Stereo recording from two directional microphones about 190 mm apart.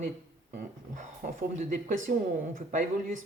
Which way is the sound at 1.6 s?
45° right (ahead or behind).